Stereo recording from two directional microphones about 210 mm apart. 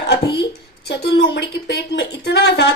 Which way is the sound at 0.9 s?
50° left (ahead or behind).